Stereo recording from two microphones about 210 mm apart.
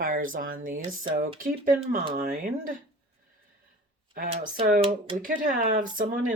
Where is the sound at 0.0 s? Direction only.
40° right (ahead or behind).